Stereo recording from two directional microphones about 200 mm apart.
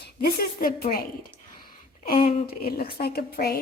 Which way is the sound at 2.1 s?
45° left (ahead or behind).